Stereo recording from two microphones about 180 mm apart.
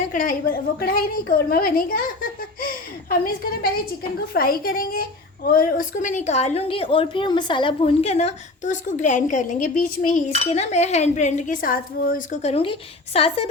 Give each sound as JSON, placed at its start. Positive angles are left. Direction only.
{"t": 0.1, "sound": "a woman's voice", "side_deg": 50}
{"t": 2.6, "sound": "a sound", "side_deg": 50}
{"t": 4.4, "sound": "a woman's voice", "side_deg": 55}